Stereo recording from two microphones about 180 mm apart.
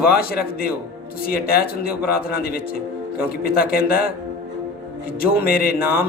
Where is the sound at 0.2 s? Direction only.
55° left (ahead or behind).